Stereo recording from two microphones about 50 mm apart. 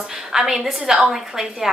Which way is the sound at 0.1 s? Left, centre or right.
Centre.